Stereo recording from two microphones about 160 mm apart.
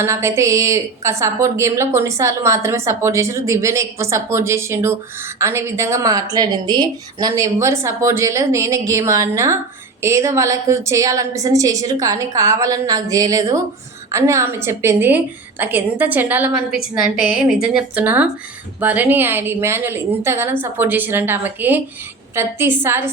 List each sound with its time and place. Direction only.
0.0 s a woman's voice: 15° right (ahead or behind)